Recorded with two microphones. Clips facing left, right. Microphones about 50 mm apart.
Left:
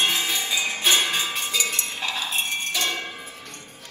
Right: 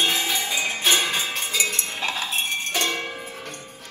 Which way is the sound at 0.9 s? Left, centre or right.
Right.